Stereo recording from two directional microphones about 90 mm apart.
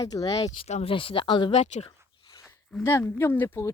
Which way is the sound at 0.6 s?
80° left.